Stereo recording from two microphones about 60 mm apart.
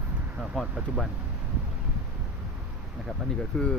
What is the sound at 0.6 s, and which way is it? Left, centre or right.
Speech, centre.